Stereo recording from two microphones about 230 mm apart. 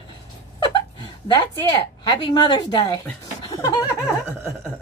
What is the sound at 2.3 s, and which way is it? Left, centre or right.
Speech, centre.